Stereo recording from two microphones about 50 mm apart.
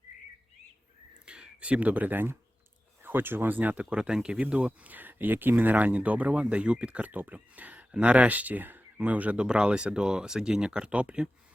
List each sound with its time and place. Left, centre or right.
1.2 s speech: right
3.8 s speech: centre